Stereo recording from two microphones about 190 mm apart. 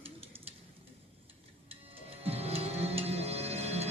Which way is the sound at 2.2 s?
30° right (ahead or behind).